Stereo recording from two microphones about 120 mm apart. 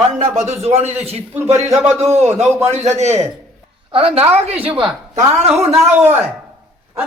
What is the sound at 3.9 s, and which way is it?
Speech, 50° right (ahead or behind).